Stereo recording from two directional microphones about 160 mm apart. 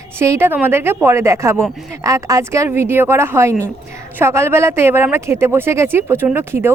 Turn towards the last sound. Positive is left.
turn(degrees=-15)  # may be behind; listen again after turning